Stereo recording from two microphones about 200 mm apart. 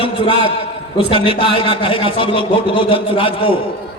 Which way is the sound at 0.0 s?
25° left (ahead or behind).